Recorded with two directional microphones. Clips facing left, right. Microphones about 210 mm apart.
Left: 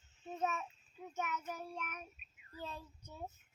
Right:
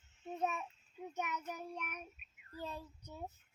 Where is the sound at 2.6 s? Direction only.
15° right (ahead or behind).